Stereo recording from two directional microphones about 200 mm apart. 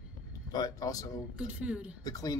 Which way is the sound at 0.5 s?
20° left (ahead or behind).